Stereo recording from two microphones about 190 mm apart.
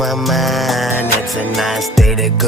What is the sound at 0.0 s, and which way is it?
Music, centre (ahead or behind).